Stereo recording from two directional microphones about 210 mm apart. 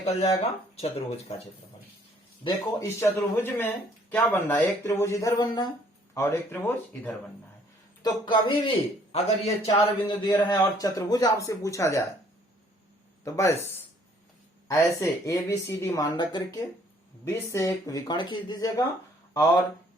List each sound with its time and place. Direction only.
0.0 s a man's voice: 30° left (ahead or behind)
3.0 s speech: 5° left (ahead or behind)
8.0 s a man's voice: 20° left (ahead or behind)
13.2 s speech: 15° left (ahead or behind)